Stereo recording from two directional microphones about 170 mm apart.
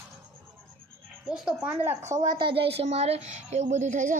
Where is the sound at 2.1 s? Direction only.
20° right (ahead or behind).